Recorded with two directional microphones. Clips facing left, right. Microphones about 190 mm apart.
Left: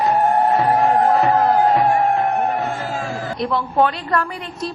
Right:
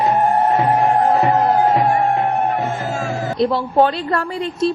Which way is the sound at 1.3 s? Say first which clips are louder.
Even; 10° right (ahead or behind).